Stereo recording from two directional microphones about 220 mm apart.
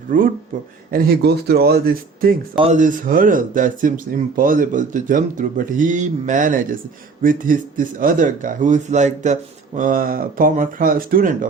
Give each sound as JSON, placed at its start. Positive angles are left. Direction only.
{"t": 0.1, "sound": "speech", "side_deg": -40}
{"t": 2.6, "sound": "speech", "side_deg": -30}